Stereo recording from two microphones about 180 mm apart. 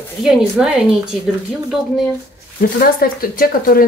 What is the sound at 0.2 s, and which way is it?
Speech, 5° right (ahead or behind).